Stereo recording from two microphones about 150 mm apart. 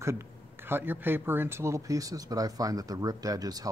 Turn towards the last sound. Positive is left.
turn(degrees=-25)  # may be behind; listen again after turning